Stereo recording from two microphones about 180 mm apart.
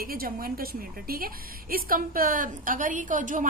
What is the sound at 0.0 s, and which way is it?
A woman's voice, 55° right (ahead or behind).